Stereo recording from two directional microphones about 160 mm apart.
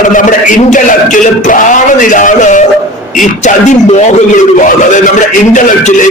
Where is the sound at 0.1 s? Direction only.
55° left (ahead or behind).